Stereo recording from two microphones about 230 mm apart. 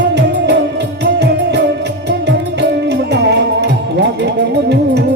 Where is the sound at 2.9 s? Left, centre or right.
Right.